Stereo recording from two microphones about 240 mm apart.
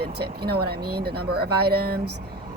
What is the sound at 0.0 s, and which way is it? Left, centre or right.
Speech, right.